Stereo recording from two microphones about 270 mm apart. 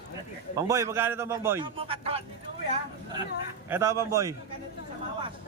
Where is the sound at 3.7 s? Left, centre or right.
Centre.